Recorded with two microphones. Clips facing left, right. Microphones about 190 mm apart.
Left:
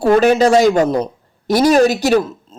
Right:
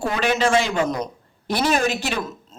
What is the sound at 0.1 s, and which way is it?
Speech, 40° left (ahead or behind).